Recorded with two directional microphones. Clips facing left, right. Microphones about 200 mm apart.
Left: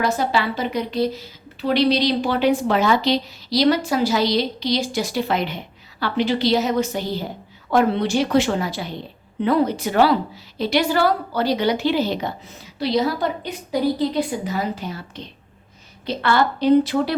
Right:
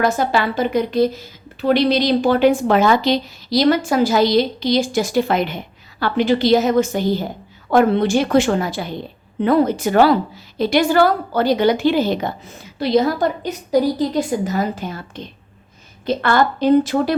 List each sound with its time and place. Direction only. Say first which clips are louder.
0.0 s a woman's voice: right 3 dB; 50° right (ahead or behind)